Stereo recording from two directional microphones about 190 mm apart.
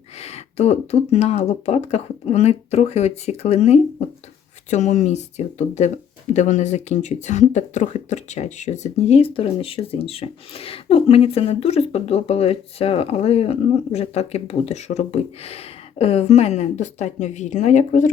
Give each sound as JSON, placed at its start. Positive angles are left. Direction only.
{"t": 0.2, "sound": "speech", "side_deg": 35}